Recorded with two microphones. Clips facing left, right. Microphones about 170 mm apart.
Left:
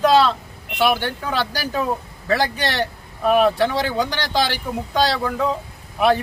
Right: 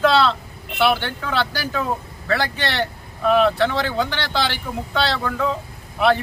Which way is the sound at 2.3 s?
15° left (ahead or behind).